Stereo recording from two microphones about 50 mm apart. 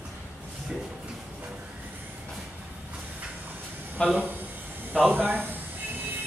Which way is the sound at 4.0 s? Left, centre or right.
Centre.